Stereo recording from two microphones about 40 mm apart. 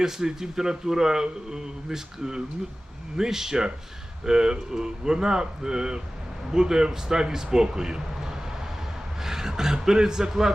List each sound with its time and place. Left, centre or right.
0.0 s a man's voice: centre